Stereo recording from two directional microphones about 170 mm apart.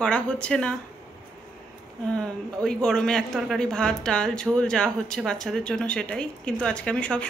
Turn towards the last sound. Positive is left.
turn(degrees=5)  # may be behind; listen again after turning